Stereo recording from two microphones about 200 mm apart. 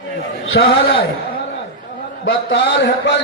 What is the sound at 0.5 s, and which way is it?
Speech, 60° left (ahead or behind).